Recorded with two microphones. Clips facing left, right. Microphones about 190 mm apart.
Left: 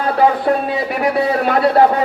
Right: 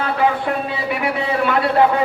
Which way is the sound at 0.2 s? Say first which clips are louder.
Left 6 dB; 40° left (ahead or behind).